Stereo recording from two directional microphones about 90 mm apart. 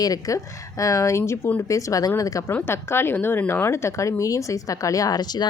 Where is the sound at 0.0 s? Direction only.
40° left (ahead or behind).